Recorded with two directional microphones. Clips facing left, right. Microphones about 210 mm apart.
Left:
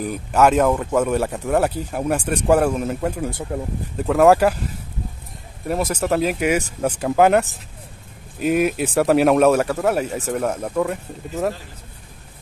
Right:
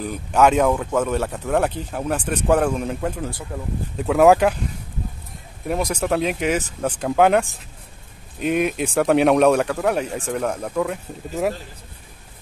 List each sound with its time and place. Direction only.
0.0 s speech: 5° left (ahead or behind)
5.7 s speech: 5° left (ahead or behind)